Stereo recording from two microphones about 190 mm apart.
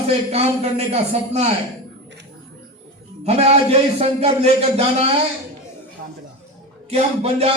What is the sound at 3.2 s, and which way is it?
A man's voice, 35° right (ahead or behind).